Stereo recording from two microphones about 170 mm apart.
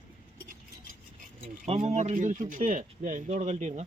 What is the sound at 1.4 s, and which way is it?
Speech, 40° right (ahead or behind).